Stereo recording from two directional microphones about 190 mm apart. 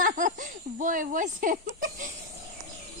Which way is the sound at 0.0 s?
45° right (ahead or behind).